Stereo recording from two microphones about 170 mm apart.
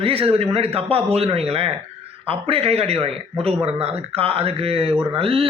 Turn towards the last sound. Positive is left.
turn(degrees=-35)  # may be behind; listen again after turning